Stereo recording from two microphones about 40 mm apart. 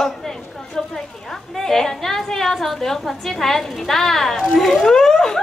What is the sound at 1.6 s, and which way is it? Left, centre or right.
A woman's voice, centre.